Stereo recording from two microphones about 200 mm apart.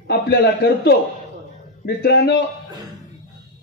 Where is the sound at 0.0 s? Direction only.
55° left (ahead or behind).